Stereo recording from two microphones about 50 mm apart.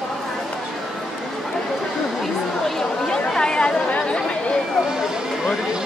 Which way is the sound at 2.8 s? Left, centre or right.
Centre.